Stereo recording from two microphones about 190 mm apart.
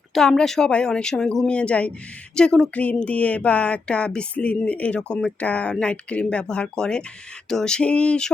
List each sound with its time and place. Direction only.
0.1 s speech: 5° left (ahead or behind)